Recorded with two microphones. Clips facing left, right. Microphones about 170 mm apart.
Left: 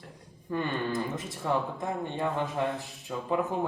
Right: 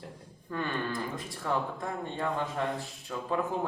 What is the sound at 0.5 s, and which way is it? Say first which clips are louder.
Speech: left 3 dB; 20° left (ahead or behind).